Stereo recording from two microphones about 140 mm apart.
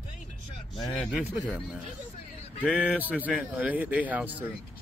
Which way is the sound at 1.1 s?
10° right (ahead or behind).